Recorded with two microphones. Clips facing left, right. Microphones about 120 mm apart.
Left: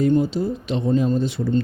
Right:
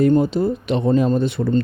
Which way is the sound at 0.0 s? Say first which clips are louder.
Right 3 dB; 55° right (ahead or behind).